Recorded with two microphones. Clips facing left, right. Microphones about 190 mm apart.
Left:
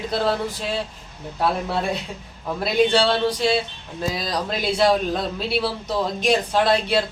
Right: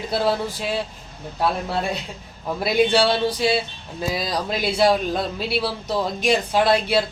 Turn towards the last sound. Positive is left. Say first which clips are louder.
# right 1 dB
turn(degrees=-5)  # may be behind; listen again after turning